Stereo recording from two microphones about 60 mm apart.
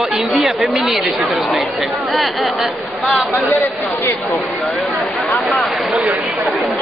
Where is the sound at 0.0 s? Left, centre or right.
Centre.